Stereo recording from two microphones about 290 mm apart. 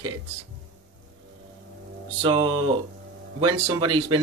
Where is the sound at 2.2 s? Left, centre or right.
Centre.